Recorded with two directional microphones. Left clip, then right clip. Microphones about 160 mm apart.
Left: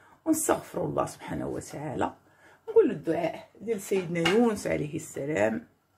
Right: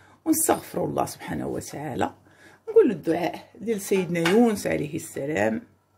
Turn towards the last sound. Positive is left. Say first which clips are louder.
# right 2 dB
turn(degrees=-30)  # may be behind; listen again after turning